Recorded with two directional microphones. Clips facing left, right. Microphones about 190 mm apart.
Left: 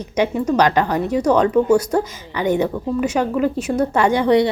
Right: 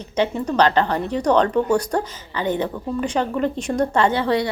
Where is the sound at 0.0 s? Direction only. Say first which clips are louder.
Left 3 dB; 10° left (ahead or behind).